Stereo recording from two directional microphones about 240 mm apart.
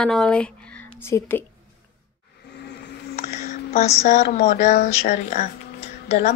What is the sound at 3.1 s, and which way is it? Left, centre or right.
A woman's voice, left.